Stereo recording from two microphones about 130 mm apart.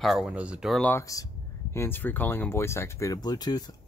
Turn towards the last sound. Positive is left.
turn(degrees=30)  # may be behind; listen again after turning